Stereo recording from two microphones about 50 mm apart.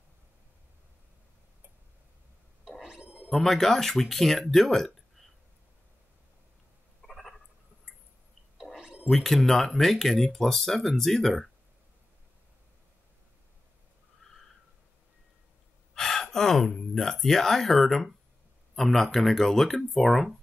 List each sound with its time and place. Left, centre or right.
2.9 s gargling: right
3.3 s speech: centre
7.1 s a sound: centre
9.1 s speech: centre
15.9 s gasp: centre
18.8 s speech: centre